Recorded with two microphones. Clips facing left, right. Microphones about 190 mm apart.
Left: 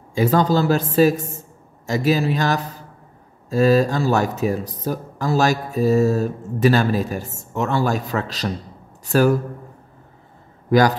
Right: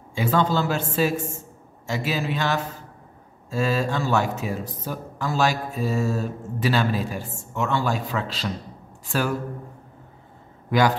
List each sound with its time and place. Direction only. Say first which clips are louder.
0.1 s speech: left 5 dB; 40° left (ahead or behind)